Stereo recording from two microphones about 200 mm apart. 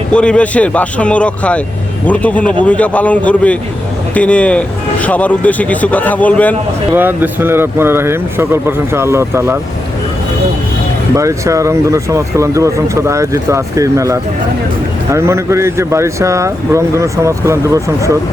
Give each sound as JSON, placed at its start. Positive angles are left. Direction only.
{"t": 0.1, "sound": "speech", "side_deg": 5}
{"t": 6.9, "sound": "speech", "side_deg": -10}
{"t": 11.1, "sound": "speech", "side_deg": -15}